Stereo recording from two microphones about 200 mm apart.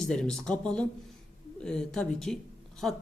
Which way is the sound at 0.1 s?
5° left (ahead or behind).